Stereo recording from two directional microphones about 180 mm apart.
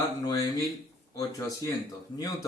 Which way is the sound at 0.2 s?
20° left (ahead or behind).